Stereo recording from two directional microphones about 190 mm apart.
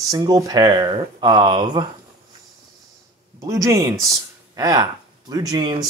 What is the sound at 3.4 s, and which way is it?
Speech, 15° right (ahead or behind).